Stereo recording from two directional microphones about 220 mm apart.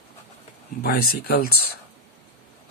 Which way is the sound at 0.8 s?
45° left (ahead or behind).